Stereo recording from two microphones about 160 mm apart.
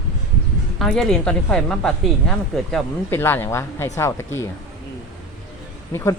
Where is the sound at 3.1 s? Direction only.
15° left (ahead or behind).